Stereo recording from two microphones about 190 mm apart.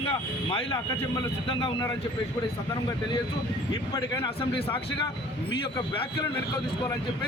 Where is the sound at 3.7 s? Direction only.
20° left (ahead or behind).